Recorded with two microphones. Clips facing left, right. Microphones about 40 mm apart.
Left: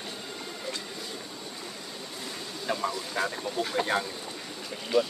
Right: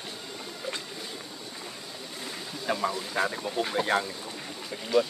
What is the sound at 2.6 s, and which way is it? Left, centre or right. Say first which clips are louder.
Speech: right 2 dB; centre.